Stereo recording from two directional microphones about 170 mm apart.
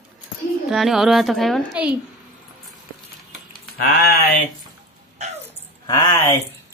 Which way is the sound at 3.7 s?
65° left (ahead or behind).